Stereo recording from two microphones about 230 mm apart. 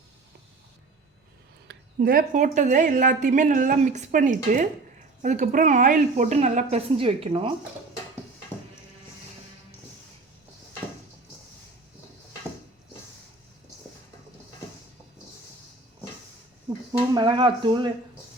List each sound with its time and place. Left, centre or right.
1.6 s a woman's voice: right
17.2 s speech: centre